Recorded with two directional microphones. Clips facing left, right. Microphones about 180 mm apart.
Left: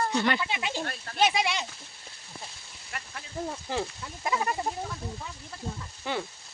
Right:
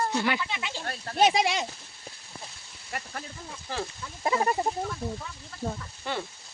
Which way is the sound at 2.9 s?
40° right (ahead or behind).